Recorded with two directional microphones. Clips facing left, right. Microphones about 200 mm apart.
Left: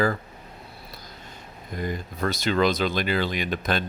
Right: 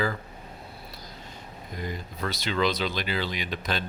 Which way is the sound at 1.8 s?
50° left (ahead or behind).